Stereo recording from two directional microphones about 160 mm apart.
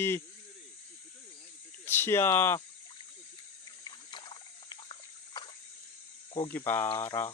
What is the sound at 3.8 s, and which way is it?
Trickle, 25° left (ahead or behind).